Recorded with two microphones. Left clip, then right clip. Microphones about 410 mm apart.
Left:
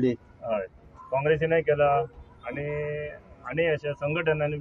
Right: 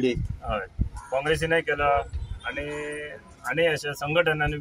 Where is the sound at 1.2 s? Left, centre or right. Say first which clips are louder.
Left 1 dB; left.